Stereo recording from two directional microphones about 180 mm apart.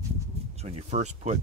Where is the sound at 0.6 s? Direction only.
35° right (ahead or behind).